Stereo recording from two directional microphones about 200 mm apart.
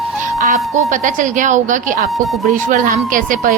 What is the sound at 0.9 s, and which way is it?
A woman's voice, 40° right (ahead or behind).